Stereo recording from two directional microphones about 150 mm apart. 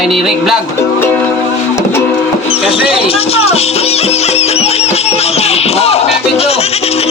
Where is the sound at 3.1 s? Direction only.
40° left (ahead or behind).